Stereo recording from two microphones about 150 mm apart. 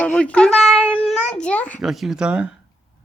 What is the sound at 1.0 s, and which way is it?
Babbling, 5° left (ahead or behind).